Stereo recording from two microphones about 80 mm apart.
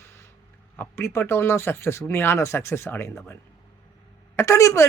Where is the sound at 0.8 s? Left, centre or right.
Left.